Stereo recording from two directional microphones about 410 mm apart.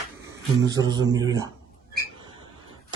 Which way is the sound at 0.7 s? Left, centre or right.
Centre.